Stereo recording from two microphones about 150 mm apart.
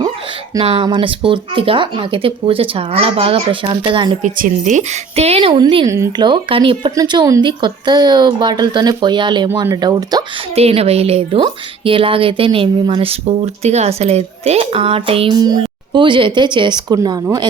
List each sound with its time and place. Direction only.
0.6 s speech: 35° right (ahead or behind)
4.2 s a woman's voice: 60° right (ahead or behind); by 6.2 s 20° right (ahead or behind)
6.2 s speech: 35° right (ahead or behind)
10.5 s speech: 40° right (ahead or behind); by 17.2 s 25° right (ahead or behind)